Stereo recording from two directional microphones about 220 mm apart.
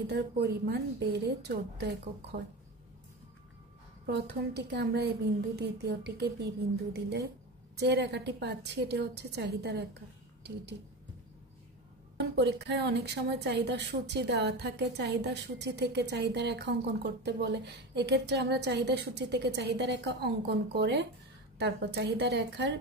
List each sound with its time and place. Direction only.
0.0 s a woman's voice: 50° right (ahead or behind)
4.1 s a woman's voice: 45° right (ahead or behind)
12.2 s a woman's voice: 50° right (ahead or behind)